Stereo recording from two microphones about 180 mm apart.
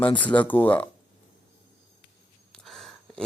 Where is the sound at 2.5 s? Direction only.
Centre (ahead or behind).